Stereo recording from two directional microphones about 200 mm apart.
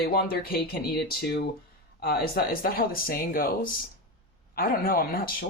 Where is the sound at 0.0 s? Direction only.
50° left (ahead or behind).